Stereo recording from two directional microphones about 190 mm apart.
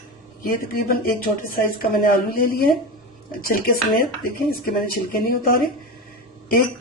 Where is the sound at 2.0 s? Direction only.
50° left (ahead or behind).